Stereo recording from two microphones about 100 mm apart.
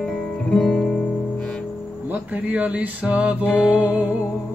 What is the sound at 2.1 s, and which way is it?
Speech, 15° right (ahead or behind).